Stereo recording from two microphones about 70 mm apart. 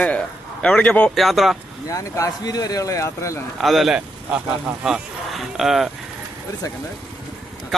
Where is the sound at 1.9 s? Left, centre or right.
Left.